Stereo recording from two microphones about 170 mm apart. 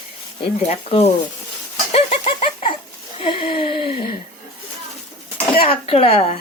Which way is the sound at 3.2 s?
30° left (ahead or behind).